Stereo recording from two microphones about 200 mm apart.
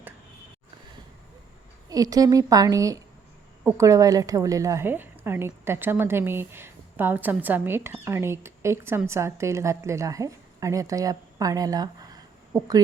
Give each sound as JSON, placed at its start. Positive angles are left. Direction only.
{"t": 1.9, "sound": "a woman's voice", "side_deg": -20}